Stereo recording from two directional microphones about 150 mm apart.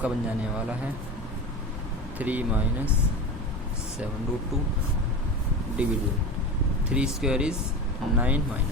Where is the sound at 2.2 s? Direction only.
10° right (ahead or behind).